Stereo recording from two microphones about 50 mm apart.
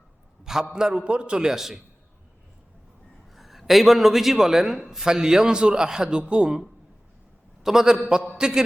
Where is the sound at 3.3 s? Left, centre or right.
Centre.